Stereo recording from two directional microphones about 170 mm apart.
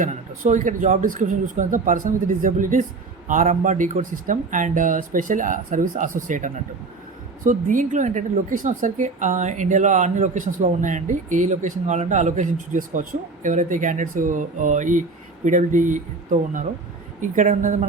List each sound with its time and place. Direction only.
0.0 s a woman's voice: 45° right (ahead or behind)